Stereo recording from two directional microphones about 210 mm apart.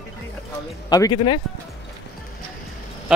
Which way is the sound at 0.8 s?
20° left (ahead or behind).